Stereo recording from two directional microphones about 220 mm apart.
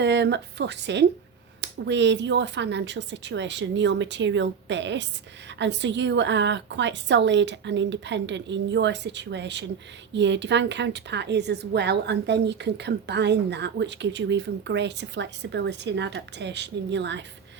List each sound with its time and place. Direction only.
0.0 s a woman's voice: 50° right (ahead or behind)